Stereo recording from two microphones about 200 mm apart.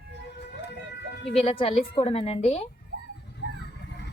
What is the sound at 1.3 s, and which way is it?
A woman's voice, 30° left (ahead or behind).